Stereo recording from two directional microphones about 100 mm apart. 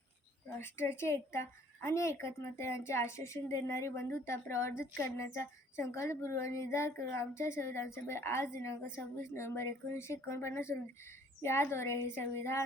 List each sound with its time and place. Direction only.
0.6 s a woman's voice: 25° left (ahead or behind)